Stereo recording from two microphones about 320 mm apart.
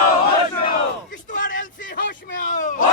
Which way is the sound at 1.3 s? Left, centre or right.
Left.